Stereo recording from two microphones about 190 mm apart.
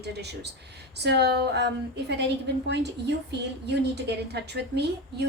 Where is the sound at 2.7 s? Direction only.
60° right (ahead or behind).